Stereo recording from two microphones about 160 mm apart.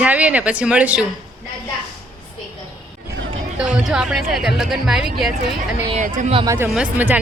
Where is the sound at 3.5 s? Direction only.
5° right (ahead or behind).